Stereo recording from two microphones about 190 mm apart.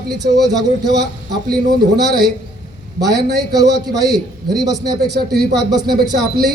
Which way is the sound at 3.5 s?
20° right (ahead or behind).